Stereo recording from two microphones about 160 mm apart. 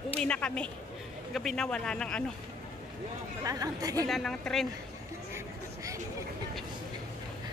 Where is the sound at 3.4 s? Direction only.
20° right (ahead or behind).